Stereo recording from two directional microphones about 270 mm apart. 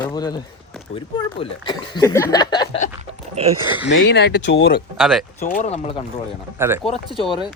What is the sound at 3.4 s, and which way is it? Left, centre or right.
Speech, right.